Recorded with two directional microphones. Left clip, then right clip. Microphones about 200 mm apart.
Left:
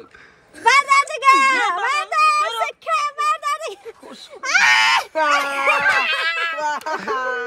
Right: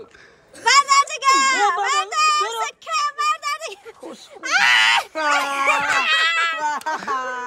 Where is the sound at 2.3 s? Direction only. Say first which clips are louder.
Left 2 dB; 30° right (ahead or behind).